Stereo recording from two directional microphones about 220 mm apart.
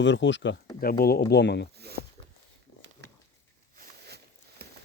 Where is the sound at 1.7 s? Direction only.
45° right (ahead or behind).